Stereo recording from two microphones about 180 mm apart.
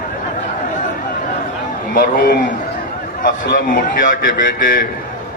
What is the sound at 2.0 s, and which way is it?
Speech, 55° left (ahead or behind).